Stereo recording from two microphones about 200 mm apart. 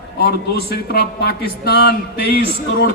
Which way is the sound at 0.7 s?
50° left (ahead or behind).